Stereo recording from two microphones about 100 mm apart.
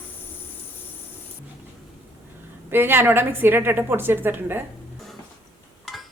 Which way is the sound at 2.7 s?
20° right (ahead or behind).